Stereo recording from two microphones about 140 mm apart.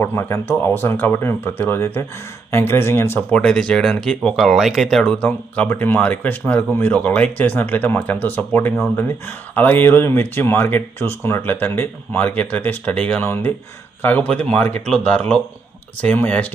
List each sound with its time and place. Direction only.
0.0 s speech: 15° left (ahead or behind)